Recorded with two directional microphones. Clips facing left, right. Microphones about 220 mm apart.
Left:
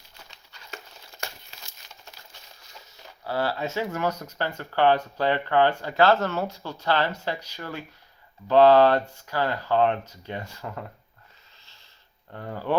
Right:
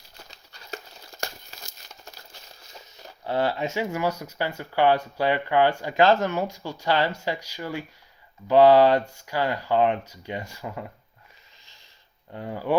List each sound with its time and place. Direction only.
0.3 s crumpling: 40° right (ahead or behind)
3.2 s speech: 20° right (ahead or behind)
11.6 s a sound: 15° right (ahead or behind)
12.3 s speech: 15° right (ahead or behind)